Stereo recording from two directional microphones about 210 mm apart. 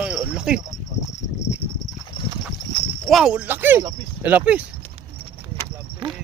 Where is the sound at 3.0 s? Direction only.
Centre (ahead or behind).